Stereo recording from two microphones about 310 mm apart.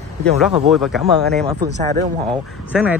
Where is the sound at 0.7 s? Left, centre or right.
Centre.